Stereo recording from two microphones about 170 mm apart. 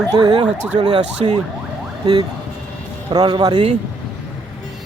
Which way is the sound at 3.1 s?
25° right (ahead or behind).